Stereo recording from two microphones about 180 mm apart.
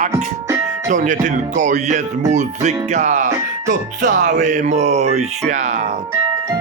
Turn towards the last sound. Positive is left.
turn(degrees=-40)  # may be behind; listen again after turning